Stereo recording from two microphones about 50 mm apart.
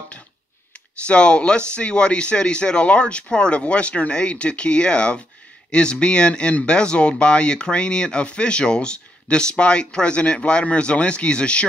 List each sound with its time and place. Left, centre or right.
1.0 s speech: left